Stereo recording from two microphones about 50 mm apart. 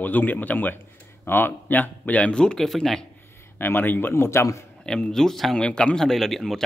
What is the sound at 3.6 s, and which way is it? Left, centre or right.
Speech, left.